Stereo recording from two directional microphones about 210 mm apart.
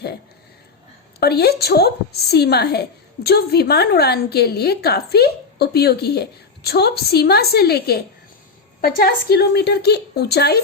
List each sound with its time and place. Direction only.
1.2 s a woman's voice: 50° left (ahead or behind)